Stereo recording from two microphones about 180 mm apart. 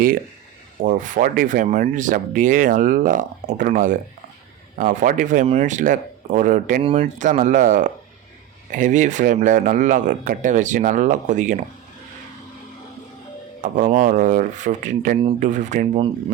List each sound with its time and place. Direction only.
0.8 s speech: 45° right (ahead or behind)
6.8 s speech: 35° right (ahead or behind)
13.6 s speech: 45° right (ahead or behind)